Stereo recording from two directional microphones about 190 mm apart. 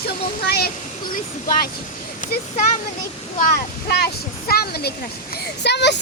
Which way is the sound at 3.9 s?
55° left (ahead or behind).